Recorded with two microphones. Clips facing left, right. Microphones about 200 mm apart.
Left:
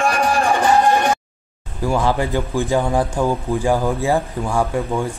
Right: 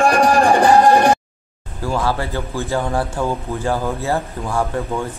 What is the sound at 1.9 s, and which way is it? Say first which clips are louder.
A man's voice: left 2 dB; 15° left (ahead or behind).